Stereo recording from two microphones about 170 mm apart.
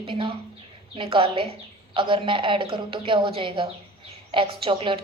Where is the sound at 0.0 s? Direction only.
30° right (ahead or behind).